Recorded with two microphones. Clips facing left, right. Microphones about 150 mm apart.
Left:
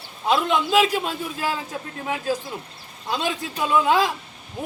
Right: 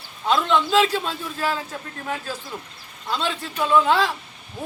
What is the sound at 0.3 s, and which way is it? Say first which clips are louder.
A man's voice: even; 10° left (ahead or behind).